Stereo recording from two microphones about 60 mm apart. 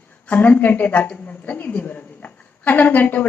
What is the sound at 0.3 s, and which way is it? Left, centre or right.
A woman's voice, left.